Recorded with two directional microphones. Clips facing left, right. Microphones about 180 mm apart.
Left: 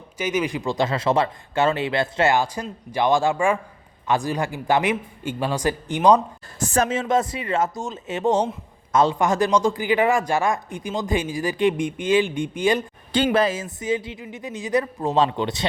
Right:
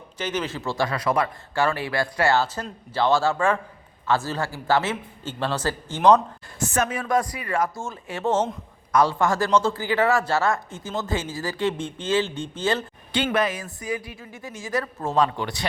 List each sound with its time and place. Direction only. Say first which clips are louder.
0.2 s speech: left 4 dB; 10° left (ahead or behind)
6.7 s speech: left 3 dB; 30° left (ahead or behind); by 12.8 s 15° left (ahead or behind)
13.3 s speech: left 3 dB; 30° left (ahead or behind)